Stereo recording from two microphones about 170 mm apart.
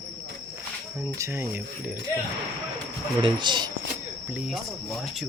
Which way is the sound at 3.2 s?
25° right (ahead or behind).